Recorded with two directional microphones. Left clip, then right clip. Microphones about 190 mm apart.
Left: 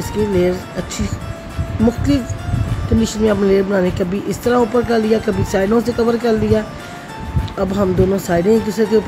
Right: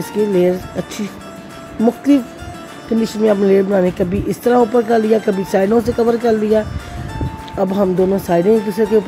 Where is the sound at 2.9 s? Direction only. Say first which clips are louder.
Right 2 dB; 15° right (ahead or behind).